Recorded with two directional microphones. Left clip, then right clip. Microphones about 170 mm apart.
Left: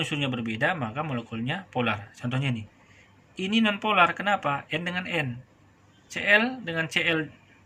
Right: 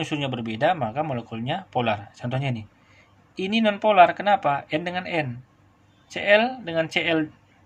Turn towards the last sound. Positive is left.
turn(degrees=-30)  # may be behind; listen again after turning